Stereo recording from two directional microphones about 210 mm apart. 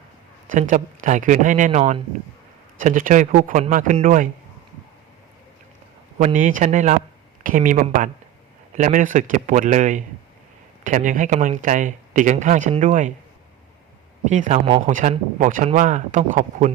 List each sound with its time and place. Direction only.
0.5 s speech: 35° right (ahead or behind)
6.1 s speech: 40° right (ahead or behind)
14.3 s speech: 35° right (ahead or behind)